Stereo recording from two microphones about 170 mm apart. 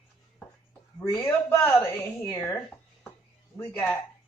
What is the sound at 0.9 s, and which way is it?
Speech, 15° left (ahead or behind).